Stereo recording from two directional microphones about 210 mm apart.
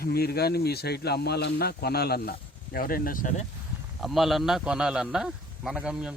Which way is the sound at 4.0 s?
Centre (ahead or behind).